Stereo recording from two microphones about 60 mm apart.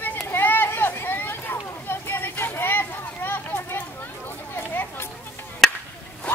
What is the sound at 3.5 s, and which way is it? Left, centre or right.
Children playing, left.